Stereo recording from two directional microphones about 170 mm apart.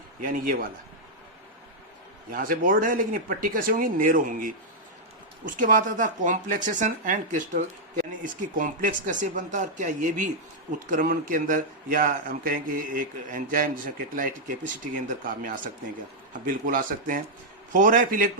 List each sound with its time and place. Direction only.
2.3 s a man's voice: 55° right (ahead or behind)